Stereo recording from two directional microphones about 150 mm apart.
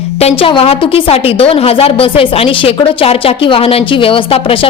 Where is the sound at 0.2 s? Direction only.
40° left (ahead or behind).